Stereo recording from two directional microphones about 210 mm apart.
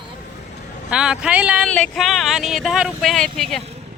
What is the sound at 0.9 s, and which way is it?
Speech, 5° right (ahead or behind).